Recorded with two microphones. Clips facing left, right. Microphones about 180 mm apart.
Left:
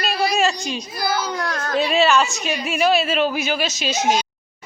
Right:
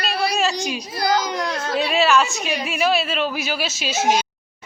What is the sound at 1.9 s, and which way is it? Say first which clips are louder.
A woman's voice: even; centre (ahead or behind).